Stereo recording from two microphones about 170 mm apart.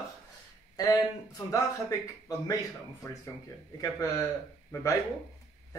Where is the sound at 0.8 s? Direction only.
20° left (ahead or behind).